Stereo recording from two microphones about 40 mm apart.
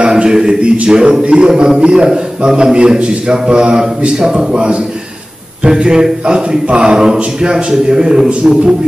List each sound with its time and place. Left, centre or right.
0.0 s a man's voice: right